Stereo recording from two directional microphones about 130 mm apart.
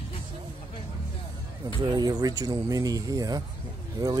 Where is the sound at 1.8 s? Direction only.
30° right (ahead or behind).